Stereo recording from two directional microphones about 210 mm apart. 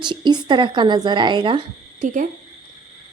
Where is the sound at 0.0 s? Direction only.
20° right (ahead or behind).